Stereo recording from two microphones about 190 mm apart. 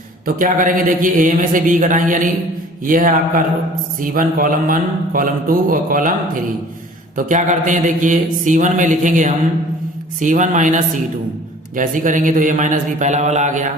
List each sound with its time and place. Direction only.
0.3 s a man's voice: 45° right (ahead or behind)
7.2 s mantra: 40° right (ahead or behind)